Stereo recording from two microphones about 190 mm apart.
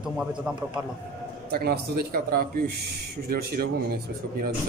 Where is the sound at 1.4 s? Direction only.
55° right (ahead or behind).